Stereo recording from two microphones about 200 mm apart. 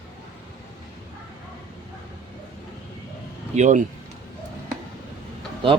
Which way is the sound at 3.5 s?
35° right (ahead or behind).